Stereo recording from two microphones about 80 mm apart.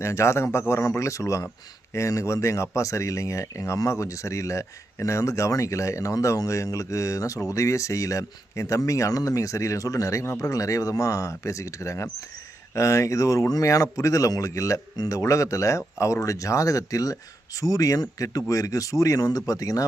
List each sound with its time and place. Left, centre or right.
0.0 s speech: left